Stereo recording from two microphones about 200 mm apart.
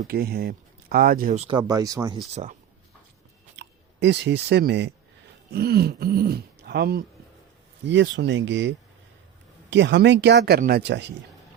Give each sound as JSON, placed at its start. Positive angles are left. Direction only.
{"t": 0.1, "sound": "speech", "side_deg": -50}
{"t": 1.4, "sound": "speech", "side_deg": -25}
{"t": 2.3, "sound": "speech", "side_deg": -35}
{"t": 3.5, "sound": "speech", "side_deg": -60}
{"t": 7.9, "sound": "speech", "side_deg": -65}